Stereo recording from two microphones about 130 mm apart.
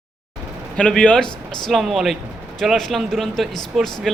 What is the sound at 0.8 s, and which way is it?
Speech, 10° left (ahead or behind).